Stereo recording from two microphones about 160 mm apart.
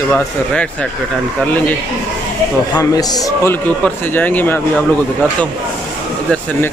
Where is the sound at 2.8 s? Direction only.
25° left (ahead or behind).